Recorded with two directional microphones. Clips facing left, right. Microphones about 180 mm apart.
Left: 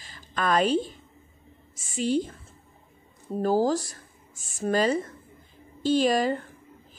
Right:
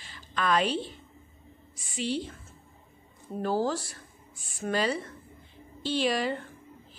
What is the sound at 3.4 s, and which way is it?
Speech, 40° left (ahead or behind).